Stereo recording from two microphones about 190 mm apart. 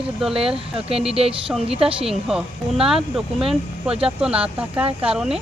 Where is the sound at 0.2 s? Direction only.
5° right (ahead or behind).